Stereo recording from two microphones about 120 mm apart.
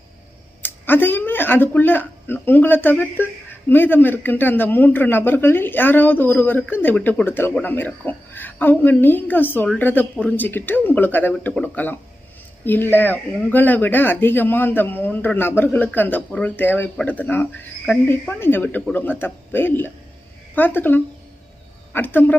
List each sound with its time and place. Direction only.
0.6 s speech: 15° left (ahead or behind)